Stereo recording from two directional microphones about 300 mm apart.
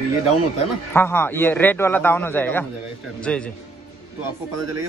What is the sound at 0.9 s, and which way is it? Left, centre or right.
A man's voice, centre.